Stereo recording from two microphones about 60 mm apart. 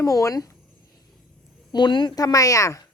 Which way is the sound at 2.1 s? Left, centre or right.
Left.